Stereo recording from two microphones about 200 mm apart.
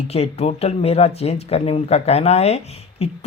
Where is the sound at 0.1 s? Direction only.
30° left (ahead or behind).